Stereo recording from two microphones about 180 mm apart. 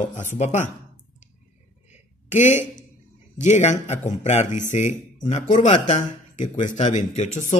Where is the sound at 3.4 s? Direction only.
40° left (ahead or behind).